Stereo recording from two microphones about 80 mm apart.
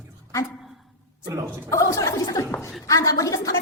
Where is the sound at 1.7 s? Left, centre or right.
Left.